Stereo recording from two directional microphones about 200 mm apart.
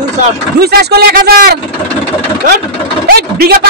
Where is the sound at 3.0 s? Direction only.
50° right (ahead or behind).